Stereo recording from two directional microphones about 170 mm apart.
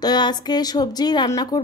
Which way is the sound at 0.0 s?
25° left (ahead or behind).